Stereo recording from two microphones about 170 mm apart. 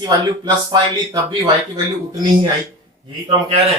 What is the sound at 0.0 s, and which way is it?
Speech, 25° right (ahead or behind).